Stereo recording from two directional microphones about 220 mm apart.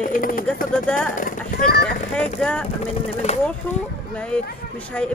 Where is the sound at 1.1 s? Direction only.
40° left (ahead or behind).